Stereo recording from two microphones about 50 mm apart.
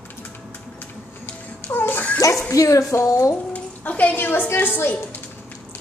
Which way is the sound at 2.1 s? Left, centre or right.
Left.